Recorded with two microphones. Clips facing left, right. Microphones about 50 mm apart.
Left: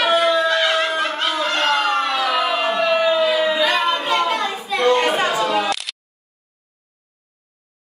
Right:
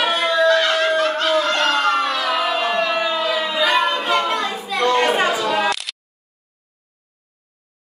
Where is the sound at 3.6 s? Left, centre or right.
Centre.